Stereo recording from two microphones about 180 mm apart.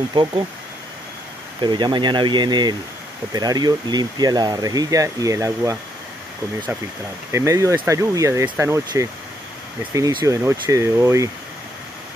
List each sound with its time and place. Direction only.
0.1 s speech: 25° right (ahead or behind)
1.6 s speech: 25° right (ahead or behind)
7.3 s speech: 15° right (ahead or behind)